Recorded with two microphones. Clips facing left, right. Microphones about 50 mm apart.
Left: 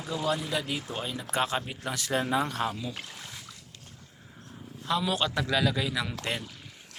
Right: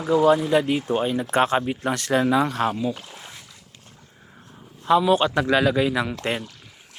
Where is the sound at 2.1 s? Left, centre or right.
Right.